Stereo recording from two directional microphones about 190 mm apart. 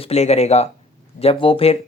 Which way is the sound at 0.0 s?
35° left (ahead or behind).